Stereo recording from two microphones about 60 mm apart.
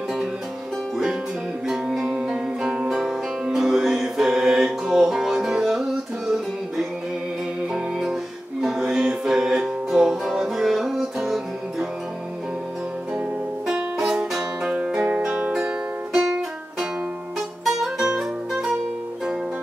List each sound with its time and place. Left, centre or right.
1.7 s music: centre
13.7 s music: centre